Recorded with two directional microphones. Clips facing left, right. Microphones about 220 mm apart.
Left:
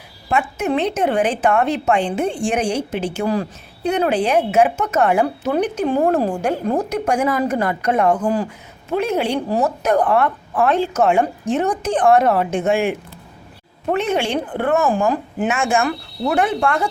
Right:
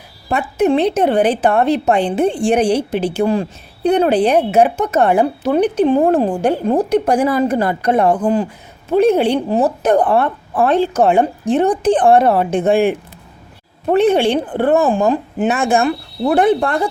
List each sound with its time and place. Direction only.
0.3 s speech: 35° right (ahead or behind); by 6.3 s 20° right (ahead or behind)
6.3 s speech: 30° right (ahead or behind)
13.9 s speech: 35° right (ahead or behind)